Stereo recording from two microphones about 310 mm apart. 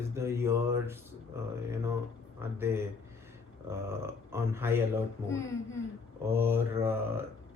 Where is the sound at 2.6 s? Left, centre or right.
Centre.